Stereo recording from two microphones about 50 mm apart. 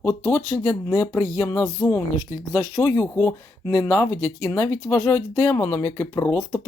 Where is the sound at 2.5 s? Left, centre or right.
Left.